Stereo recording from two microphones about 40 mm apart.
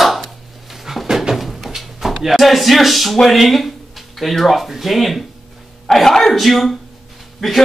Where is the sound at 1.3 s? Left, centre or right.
Centre.